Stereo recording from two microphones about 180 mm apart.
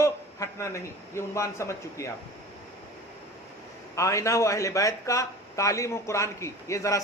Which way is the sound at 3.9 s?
15° left (ahead or behind).